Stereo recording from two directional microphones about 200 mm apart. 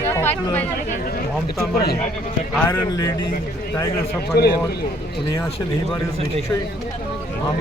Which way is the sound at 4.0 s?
50° left (ahead or behind).